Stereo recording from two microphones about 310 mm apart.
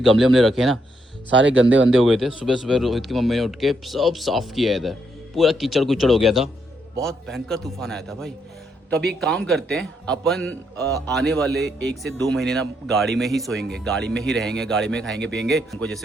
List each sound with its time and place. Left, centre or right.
0.0 s a man's voice: centre
1.3 s speech: right
2.0 s a man's voice: centre